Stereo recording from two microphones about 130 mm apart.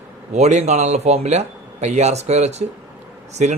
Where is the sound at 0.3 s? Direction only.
60° right (ahead or behind).